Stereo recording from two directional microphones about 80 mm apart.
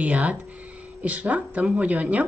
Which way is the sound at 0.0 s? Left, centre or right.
Centre.